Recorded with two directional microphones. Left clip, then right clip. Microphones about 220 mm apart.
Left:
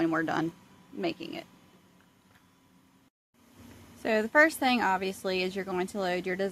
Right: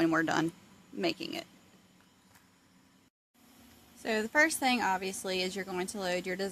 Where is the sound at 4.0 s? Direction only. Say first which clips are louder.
Left 4 dB; 15° left (ahead or behind).